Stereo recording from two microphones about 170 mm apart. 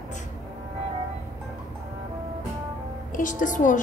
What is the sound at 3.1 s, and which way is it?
Speech, 50° left (ahead or behind).